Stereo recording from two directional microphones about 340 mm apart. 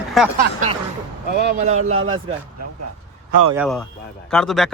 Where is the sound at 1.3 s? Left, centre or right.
Right.